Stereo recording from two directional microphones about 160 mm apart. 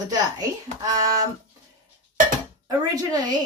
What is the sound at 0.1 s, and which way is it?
Speech, 25° right (ahead or behind).